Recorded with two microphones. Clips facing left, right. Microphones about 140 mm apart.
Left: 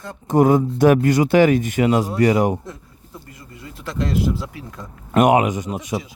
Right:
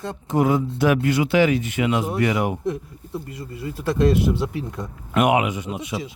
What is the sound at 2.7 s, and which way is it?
Speech, 25° right (ahead or behind).